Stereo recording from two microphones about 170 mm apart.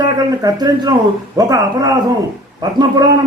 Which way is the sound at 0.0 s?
20° right (ahead or behind).